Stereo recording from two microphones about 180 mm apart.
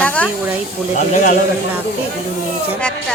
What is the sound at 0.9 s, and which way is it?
Speech, 45° left (ahead or behind).